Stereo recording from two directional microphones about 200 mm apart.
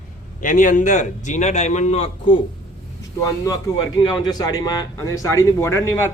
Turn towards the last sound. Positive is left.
turn(degrees=15)  # may be behind; listen again after turning